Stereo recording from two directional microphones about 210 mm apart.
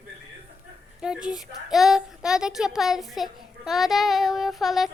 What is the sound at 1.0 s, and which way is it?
A child's voice, 5° right (ahead or behind).